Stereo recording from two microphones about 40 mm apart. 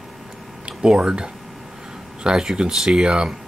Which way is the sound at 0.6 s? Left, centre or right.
Right.